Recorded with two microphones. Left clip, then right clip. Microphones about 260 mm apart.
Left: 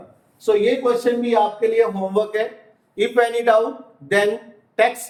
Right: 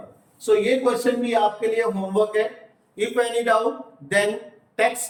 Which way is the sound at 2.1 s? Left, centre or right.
Centre.